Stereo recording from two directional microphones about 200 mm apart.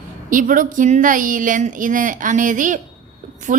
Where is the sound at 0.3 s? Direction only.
40° right (ahead or behind).